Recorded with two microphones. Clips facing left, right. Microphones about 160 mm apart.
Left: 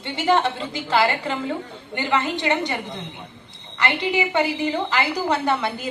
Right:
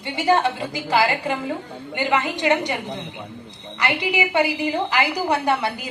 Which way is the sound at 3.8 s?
15° right (ahead or behind).